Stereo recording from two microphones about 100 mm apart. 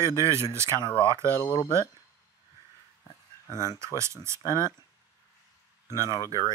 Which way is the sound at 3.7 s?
30° right (ahead or behind).